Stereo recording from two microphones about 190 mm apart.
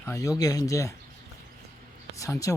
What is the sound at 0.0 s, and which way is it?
Speech, 15° left (ahead or behind).